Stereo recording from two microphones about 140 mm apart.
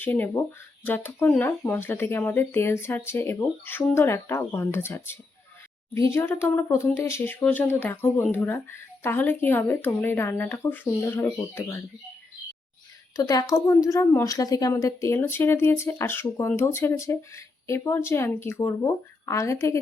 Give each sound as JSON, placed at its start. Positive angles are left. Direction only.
{"t": 0.0, "sound": "speech", "side_deg": 15}
{"t": 13.1, "sound": "a woman's voice", "side_deg": 25}